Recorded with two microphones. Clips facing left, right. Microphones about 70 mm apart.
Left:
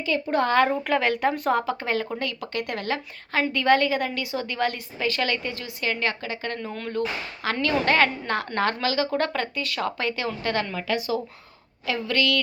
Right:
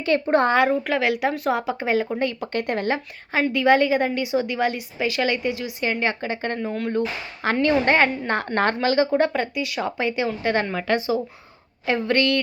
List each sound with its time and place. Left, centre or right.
0.3 s speech: right
0.7 s a woman's voice: centre
1.6 s a woman's voice: centre
2.1 s speech: right
3.5 s a woman's voice: centre
6.6 s a woman's voice: centre
7.4 s speech: right
9.1 s a woman's voice: centre
10.5 s speech: right
10.8 s speech: right